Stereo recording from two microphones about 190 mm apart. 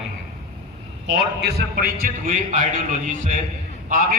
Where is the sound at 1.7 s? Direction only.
45° right (ahead or behind).